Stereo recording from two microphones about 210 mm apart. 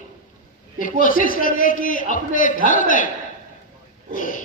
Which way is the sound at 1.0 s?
40° left (ahead or behind).